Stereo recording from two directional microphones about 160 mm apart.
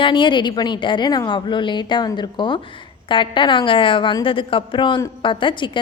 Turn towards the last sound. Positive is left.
turn(degrees=30)  # may be behind; listen again after turning